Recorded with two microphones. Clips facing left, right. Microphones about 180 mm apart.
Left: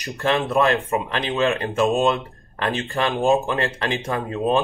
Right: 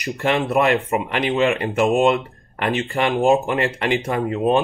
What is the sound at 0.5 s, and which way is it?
Speech, 15° right (ahead or behind).